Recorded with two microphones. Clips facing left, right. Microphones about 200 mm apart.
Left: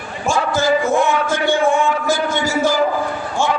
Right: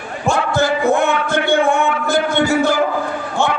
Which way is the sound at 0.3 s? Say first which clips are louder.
Even; 60° right (ahead or behind).